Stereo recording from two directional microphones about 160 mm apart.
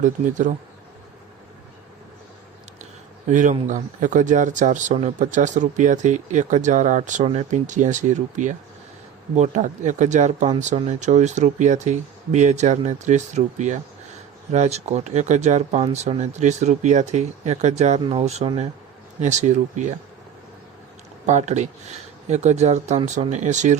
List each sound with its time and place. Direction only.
0.0 s speech: 50° right (ahead or behind)
3.2 s speech: 50° right (ahead or behind)
21.2 s speech: 45° right (ahead or behind)